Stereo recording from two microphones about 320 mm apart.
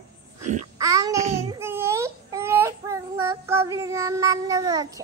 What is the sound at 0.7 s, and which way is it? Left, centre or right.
Child singing, centre.